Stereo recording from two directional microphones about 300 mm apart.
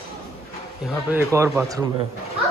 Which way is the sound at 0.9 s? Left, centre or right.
Centre.